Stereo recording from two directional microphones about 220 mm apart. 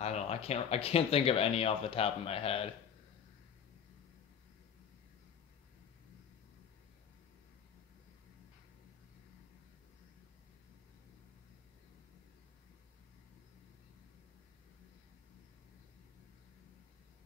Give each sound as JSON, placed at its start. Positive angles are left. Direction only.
{"t": 0.0, "sound": "speech", "side_deg": 30}